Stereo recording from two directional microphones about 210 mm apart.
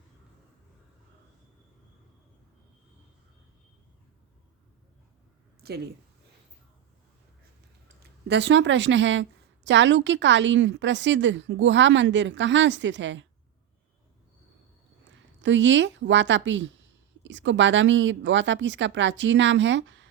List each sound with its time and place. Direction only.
5.6 s speech: 50° right (ahead or behind)
8.3 s a woman's voice: 55° right (ahead or behind)
15.4 s a woman's voice: 60° right (ahead or behind)